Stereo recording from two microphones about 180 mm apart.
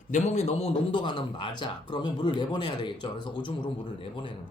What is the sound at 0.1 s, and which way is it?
Speech, 40° left (ahead or behind).